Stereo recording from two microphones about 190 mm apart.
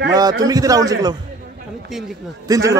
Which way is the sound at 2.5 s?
15° right (ahead or behind).